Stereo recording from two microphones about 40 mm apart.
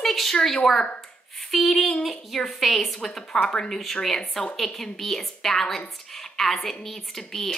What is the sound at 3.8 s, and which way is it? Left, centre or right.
A woman's voice, centre.